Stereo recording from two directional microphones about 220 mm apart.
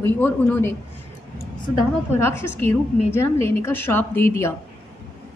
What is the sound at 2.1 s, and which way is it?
A woman's voice, 10° left (ahead or behind).